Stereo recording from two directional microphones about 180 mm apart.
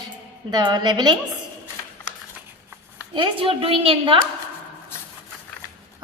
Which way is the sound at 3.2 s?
30° right (ahead or behind).